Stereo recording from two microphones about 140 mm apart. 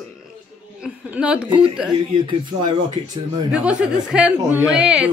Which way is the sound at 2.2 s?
35° right (ahead or behind).